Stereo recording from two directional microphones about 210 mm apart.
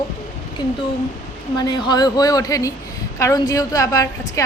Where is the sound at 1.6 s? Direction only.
20° left (ahead or behind).